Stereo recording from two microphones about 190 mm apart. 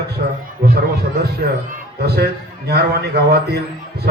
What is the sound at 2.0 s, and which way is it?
A man's voice, 60° right (ahead or behind).